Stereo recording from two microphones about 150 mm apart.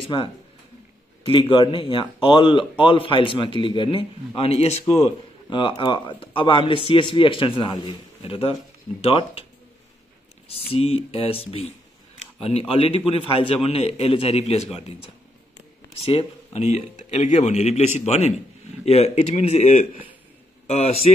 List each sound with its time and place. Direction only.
0.0 s a man's voice: 35° left (ahead or behind)
10.5 s a man's voice: 40° left (ahead or behind)
16.1 s a man's voice: 40° left (ahead or behind)